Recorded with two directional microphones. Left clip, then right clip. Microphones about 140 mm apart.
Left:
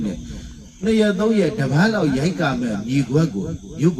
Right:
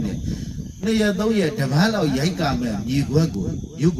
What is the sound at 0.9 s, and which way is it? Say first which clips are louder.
A man's voice: left 3 dB; 25° right (ahead or behind).